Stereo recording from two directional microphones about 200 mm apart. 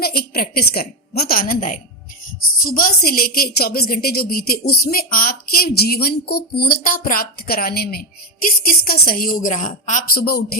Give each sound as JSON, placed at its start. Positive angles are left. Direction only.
{"t": 0.0, "sound": "a woman's voice", "side_deg": 50}